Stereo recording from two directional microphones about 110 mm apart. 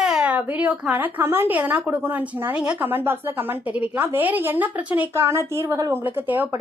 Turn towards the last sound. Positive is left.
turn(degrees=-15)  # may be behind; listen again after turning